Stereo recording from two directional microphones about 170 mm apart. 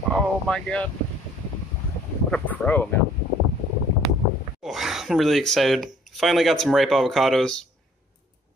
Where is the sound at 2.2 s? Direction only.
5° left (ahead or behind).